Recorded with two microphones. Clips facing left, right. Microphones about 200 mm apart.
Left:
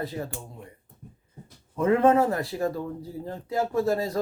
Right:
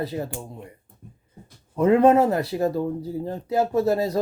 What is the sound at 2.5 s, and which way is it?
Speech, 30° right (ahead or behind).